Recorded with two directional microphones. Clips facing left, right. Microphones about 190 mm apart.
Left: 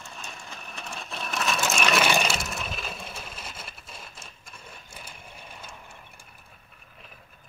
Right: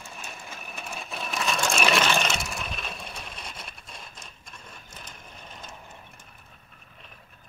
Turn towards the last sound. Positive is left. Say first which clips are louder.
# even
turn(degrees=10)  # may be behind; listen again after turning